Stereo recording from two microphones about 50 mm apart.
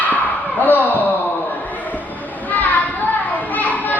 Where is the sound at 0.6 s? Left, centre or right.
Left.